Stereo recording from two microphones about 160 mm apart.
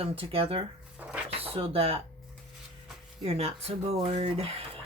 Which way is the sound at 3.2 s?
40° right (ahead or behind).